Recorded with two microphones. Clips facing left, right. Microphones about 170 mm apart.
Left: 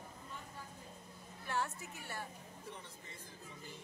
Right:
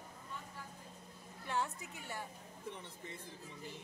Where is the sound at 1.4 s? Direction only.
15° right (ahead or behind).